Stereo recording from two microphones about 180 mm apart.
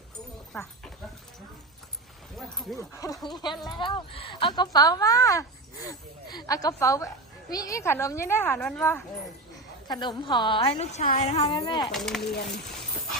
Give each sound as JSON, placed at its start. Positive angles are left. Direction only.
{"t": 2.3, "sound": "speech", "side_deg": 0}
{"t": 2.7, "sound": "a woman's voice", "side_deg": 20}
{"t": 9.9, "sound": "a woman's voice", "side_deg": 25}
{"t": 11.4, "sound": "speech", "side_deg": 25}
{"t": 11.9, "sound": "speech", "side_deg": 0}